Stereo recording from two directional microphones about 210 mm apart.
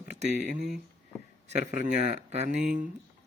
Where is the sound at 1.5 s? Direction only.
35° right (ahead or behind).